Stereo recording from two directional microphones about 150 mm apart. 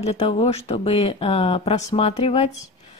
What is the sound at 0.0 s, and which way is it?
A woman's voice, 45° left (ahead or behind).